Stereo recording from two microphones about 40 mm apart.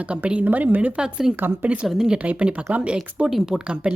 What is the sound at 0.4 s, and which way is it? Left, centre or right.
Speech, right.